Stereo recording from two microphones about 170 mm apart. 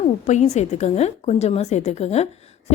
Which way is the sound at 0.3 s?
40° left (ahead or behind).